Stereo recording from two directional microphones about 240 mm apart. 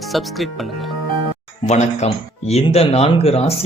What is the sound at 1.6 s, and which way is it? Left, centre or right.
Speech, left.